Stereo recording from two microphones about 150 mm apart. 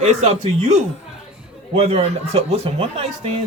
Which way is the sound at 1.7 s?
45° right (ahead or behind).